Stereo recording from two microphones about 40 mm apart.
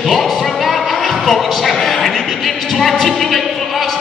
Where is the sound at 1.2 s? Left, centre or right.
Centre.